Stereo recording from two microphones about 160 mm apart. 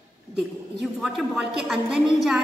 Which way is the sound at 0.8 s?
Centre (ahead or behind).